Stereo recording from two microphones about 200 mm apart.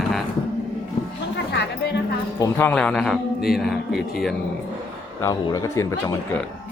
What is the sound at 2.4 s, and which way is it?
Speech, 10° left (ahead or behind).